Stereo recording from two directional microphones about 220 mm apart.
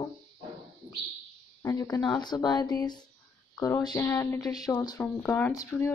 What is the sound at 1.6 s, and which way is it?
Speech, 15° left (ahead or behind).